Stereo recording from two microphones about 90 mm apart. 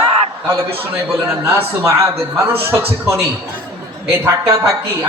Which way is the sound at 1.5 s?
30° right (ahead or behind).